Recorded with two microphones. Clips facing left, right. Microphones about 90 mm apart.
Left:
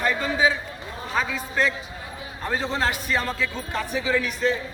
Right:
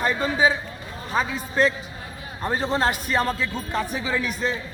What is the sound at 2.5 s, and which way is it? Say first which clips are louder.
Speech: right 2 dB; 35° right (ahead or behind).